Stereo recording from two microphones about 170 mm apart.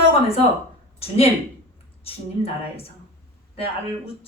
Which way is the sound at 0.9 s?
35° left (ahead or behind).